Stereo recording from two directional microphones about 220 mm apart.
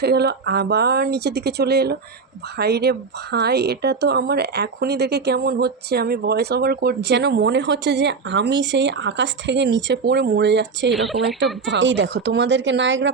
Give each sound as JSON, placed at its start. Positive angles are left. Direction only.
{"t": 0.0, "sound": "speech", "side_deg": -45}
{"t": 10.9, "sound": "speech", "side_deg": 0}
{"t": 11.3, "sound": "speech", "side_deg": -55}